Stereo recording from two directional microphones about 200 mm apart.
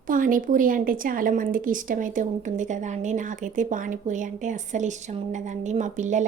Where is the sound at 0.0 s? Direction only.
45° right (ahead or behind).